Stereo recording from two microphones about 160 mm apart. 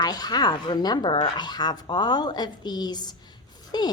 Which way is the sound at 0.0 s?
25° left (ahead or behind).